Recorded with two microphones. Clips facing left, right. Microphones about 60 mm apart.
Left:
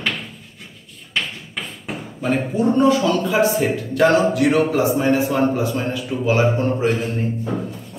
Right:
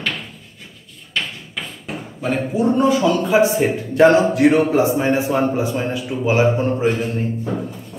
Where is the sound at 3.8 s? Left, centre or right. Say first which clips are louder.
Right 5 dB; right.